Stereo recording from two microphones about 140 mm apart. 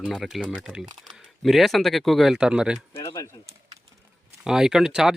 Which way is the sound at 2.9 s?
25° left (ahead or behind).